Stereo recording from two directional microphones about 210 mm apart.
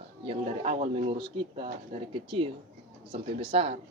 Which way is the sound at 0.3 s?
30° right (ahead or behind).